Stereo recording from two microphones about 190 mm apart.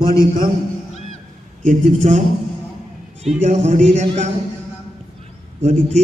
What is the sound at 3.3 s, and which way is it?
Speech, 35° right (ahead or behind).